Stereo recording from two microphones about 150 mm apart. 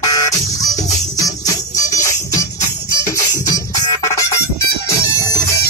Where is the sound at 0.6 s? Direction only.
25° left (ahead or behind).